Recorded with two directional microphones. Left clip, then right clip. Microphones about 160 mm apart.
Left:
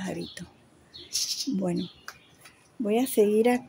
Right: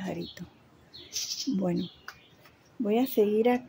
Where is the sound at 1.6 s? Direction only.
Centre (ahead or behind).